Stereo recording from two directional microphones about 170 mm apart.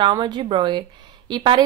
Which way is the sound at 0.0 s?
25° right (ahead or behind).